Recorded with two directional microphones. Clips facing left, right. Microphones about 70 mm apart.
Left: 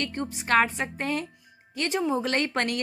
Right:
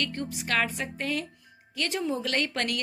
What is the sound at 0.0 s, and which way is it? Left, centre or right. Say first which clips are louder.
A woman's voice: left 1 dB; left.